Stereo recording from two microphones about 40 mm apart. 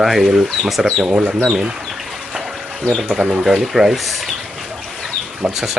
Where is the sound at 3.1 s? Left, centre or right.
Centre.